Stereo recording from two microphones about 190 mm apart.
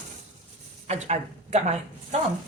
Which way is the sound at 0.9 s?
35° right (ahead or behind).